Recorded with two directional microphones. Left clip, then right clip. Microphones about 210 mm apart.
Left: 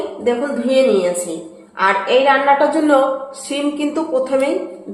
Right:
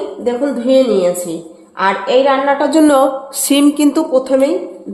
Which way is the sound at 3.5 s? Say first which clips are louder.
Right 8 dB; 50° right (ahead or behind).